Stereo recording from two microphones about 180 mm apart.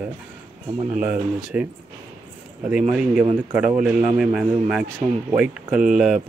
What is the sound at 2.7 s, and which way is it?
Speech, 5° right (ahead or behind).